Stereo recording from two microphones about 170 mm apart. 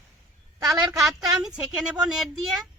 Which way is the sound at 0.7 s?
Centre (ahead or behind).